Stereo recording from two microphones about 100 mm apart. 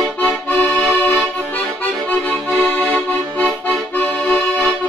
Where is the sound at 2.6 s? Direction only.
15° left (ahead or behind).